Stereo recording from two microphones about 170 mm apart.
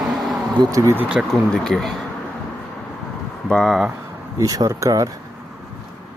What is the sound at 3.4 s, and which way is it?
Speech, 5° left (ahead or behind).